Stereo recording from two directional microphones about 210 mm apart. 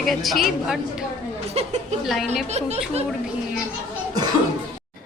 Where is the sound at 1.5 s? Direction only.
30° right (ahead or behind).